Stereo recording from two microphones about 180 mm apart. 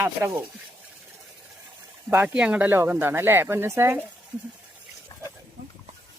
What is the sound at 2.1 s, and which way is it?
Speech, 10° right (ahead or behind).